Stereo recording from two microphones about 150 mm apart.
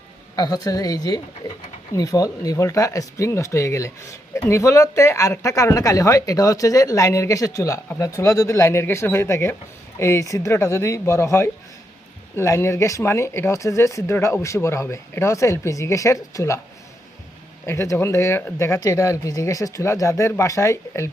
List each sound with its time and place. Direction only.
0.3 s speech: 25° left (ahead or behind)
17.7 s speech: 20° left (ahead or behind)